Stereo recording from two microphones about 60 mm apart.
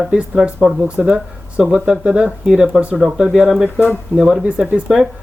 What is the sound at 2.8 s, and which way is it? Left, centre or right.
Speech, centre.